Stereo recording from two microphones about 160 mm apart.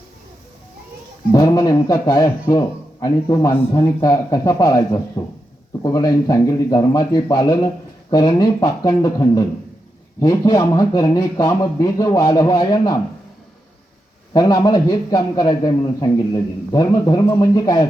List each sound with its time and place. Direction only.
1.3 s a man's voice: 20° left (ahead or behind)
14.3 s a man's voice: 25° left (ahead or behind)